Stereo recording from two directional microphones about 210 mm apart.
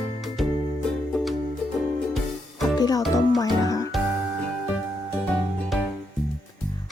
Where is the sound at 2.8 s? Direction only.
15° left (ahead or behind).